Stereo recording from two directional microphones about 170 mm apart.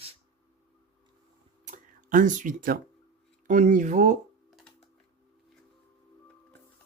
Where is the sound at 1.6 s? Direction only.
50° right (ahead or behind).